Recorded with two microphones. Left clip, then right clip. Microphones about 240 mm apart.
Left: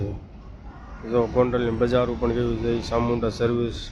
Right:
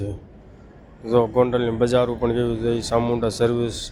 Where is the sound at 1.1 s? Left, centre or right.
Centre.